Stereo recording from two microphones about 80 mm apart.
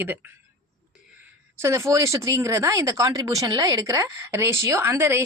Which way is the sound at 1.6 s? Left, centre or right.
Right.